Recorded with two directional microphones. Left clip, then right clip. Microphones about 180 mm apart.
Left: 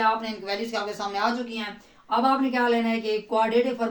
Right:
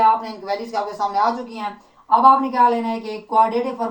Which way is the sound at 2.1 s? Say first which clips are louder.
Right 9 dB; 20° left (ahead or behind).